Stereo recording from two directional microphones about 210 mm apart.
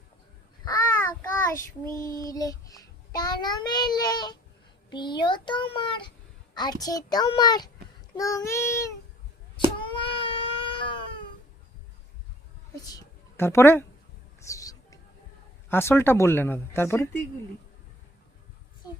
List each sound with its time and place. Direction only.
0.6 s babbling: 15° left (ahead or behind)
1.9 s child singing: 15° left (ahead or behind)
8.1 s speech: 15° left (ahead or behind)
9.7 s cat: 25° left (ahead or behind)
12.9 s a woman's voice: 10° left (ahead or behind)
14.4 s a sound: 15° left (ahead or behind)
15.7 s speech: 10° left (ahead or behind)